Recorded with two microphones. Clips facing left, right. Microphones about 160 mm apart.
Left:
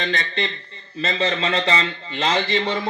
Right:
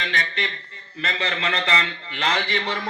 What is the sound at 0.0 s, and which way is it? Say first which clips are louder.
A man's voice: left 4 dB; 35° left (ahead or behind).